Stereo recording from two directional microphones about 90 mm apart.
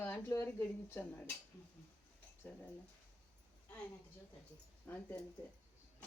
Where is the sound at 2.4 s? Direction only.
20° left (ahead or behind).